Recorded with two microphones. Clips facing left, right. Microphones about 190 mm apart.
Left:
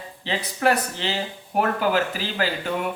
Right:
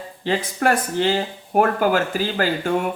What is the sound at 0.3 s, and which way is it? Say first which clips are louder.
Speech: right 2 dB; 50° right (ahead or behind).